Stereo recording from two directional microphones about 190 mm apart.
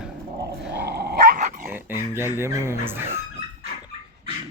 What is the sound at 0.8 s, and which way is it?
Dog, 55° right (ahead or behind).